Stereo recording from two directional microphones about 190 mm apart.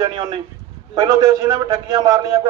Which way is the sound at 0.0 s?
20° right (ahead or behind).